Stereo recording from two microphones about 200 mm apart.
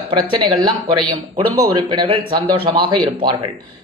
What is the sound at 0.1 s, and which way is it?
Speech, 25° right (ahead or behind).